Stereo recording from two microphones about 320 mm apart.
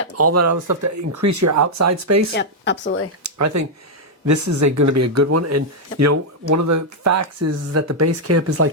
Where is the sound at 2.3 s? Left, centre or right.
Left.